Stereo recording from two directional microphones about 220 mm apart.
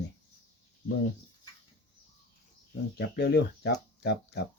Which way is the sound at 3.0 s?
50° left (ahead or behind).